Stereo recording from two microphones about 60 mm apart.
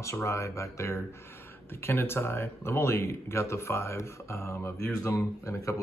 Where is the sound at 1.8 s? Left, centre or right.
Left.